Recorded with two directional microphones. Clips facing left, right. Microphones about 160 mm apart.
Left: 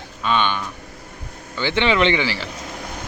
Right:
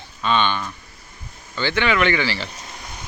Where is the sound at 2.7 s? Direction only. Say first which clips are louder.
Left 6 dB; 60° left (ahead or behind).